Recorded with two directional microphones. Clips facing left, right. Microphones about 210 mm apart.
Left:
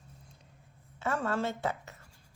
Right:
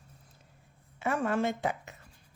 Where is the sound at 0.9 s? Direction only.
15° right (ahead or behind).